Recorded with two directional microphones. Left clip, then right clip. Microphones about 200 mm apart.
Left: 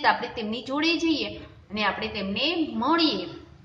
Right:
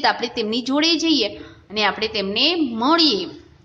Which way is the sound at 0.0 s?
45° right (ahead or behind).